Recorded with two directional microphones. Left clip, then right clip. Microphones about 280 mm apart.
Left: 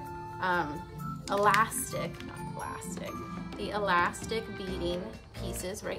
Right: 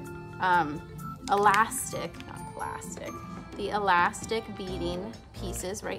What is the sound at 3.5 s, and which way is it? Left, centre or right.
Speech, centre.